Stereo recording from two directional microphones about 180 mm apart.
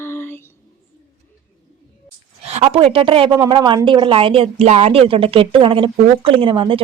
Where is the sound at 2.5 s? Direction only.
35° right (ahead or behind).